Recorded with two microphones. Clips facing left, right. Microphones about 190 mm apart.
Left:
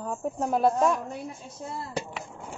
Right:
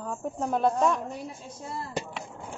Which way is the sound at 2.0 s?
Centre (ahead or behind).